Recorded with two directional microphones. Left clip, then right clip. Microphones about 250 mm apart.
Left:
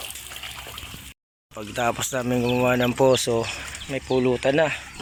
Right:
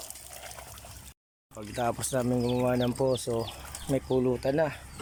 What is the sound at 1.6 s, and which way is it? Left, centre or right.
Speech, centre.